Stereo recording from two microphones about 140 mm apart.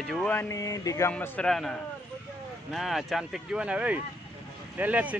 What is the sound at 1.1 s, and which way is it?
Speech, 10° left (ahead or behind).